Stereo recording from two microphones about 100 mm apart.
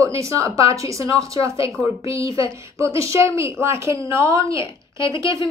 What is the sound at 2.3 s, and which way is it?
A woman's voice, 30° right (ahead or behind).